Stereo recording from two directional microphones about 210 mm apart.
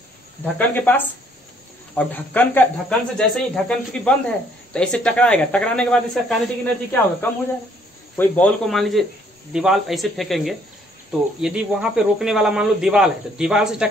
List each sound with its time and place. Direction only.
0.6 s speech: 10° left (ahead or behind)